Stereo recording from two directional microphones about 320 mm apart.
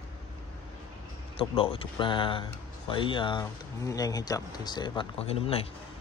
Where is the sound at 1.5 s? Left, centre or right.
Centre.